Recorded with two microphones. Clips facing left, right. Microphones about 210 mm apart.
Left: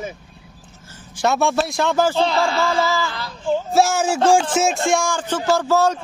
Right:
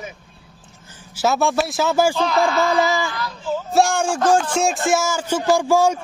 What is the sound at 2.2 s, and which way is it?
Speech, 30° left (ahead or behind).